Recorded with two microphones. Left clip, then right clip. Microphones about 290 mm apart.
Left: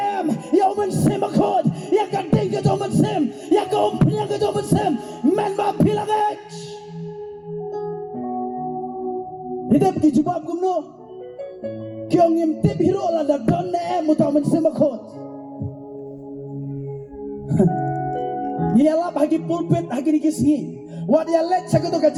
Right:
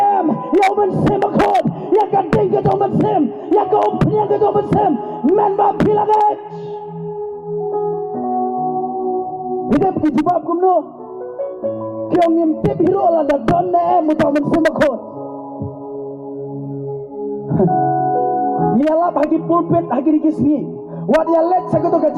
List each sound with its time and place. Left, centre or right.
0.0 s music: left
7.7 s music: left
9.9 s music: left
12.3 s music: left
17.5 s speech: left
21.1 s music: left